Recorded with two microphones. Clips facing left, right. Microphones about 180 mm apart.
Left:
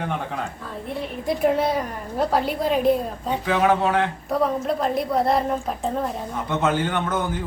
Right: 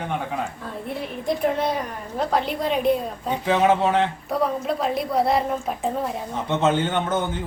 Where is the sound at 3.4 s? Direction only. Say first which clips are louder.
Right 1 dB; 25° right (ahead or behind).